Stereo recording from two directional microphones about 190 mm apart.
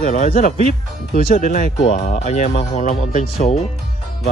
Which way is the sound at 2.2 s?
35° left (ahead or behind).